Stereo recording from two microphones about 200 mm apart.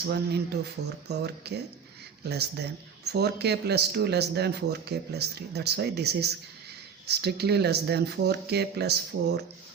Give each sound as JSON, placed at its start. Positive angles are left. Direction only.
{"t": 0.1, "sound": "speech", "side_deg": -55}